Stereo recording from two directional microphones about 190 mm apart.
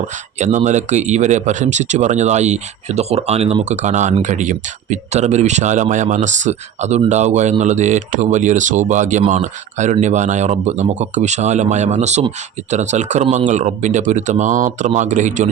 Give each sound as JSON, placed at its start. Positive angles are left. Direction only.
{"t": 0.3, "sound": "speech", "side_deg": -40}